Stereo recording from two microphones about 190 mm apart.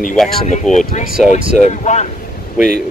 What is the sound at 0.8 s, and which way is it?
Speech, 50° left (ahead or behind).